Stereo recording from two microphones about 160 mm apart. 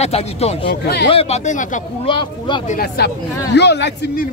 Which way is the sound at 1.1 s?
35° left (ahead or behind).